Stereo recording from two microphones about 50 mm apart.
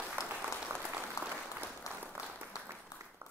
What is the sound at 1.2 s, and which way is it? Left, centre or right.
Applause, left.